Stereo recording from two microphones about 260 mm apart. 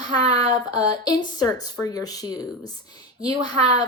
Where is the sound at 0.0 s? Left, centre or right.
Centre.